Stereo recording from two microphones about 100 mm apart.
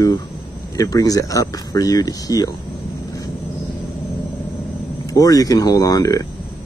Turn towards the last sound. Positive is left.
turn(degrees=35)  # may be behind; listen again after turning